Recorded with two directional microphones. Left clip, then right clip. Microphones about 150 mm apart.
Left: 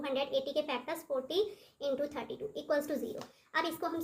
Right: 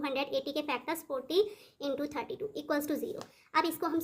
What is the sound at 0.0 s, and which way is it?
A woman's voice, 50° right (ahead or behind).